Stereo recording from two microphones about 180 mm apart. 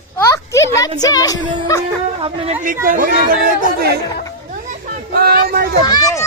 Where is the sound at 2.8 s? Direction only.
50° right (ahead or behind).